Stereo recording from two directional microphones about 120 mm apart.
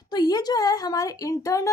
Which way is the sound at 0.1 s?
35° left (ahead or behind).